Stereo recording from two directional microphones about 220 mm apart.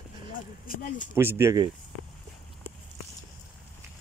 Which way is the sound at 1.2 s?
10° right (ahead or behind).